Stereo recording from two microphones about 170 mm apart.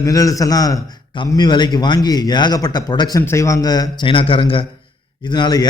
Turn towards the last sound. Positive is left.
turn(degrees=25)  # may be behind; listen again after turning